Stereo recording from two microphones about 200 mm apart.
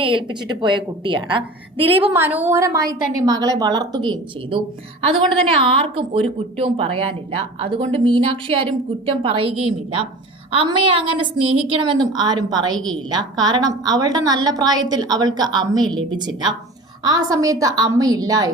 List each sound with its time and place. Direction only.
0.0 s a woman's voice: 25° right (ahead or behind)
2.1 s a woman's voice: 10° right (ahead or behind)